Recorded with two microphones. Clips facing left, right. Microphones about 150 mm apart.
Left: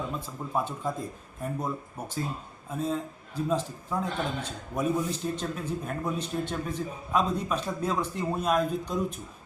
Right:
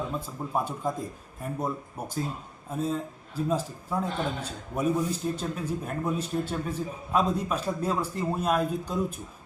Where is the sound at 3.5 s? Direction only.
10° right (ahead or behind).